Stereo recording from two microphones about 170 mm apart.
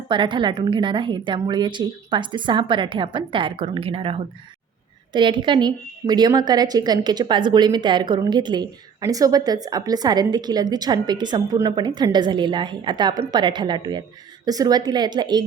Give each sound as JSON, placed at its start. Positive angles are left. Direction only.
{"t": 0.1, "sound": "a woman's voice", "side_deg": -30}